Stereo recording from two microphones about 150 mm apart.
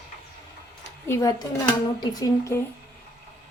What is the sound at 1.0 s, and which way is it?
Speech, 20° left (ahead or behind).